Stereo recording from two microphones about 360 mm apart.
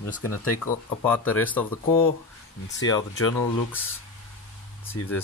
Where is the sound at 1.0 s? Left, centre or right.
Centre.